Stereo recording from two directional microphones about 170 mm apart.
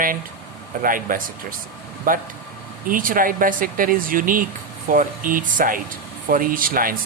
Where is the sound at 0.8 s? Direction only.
55° right (ahead or behind).